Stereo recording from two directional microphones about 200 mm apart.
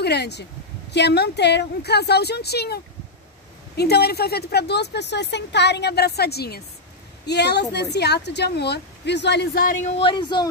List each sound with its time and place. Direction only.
0.0 s a woman's voice: 55° left (ahead or behind)
9.8 s speech: 30° left (ahead or behind)